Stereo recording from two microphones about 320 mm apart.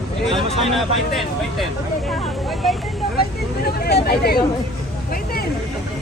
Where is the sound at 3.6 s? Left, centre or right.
Left.